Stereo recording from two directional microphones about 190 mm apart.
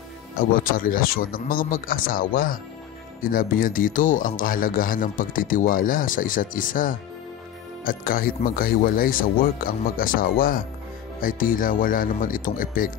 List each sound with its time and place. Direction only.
0.4 s a man's voice: 50° left (ahead or behind)